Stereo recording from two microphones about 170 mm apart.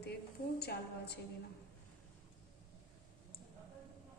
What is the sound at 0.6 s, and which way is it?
Speech, 70° left (ahead or behind).